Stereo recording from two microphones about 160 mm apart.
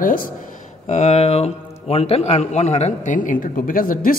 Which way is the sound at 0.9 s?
45° left (ahead or behind).